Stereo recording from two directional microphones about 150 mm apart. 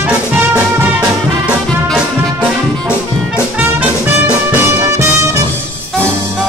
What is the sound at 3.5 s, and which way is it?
Music, 10° right (ahead or behind).